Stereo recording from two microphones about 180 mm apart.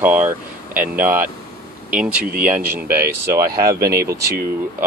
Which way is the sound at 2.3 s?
50° right (ahead or behind).